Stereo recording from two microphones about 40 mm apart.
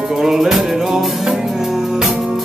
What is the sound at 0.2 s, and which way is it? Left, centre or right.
Music, centre.